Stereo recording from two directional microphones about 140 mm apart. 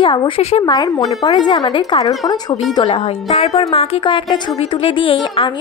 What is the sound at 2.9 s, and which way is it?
A woman's voice, 45° left (ahead or behind).